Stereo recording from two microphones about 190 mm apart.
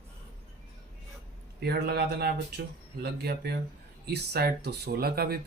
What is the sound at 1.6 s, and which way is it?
Speech, 55° right (ahead or behind).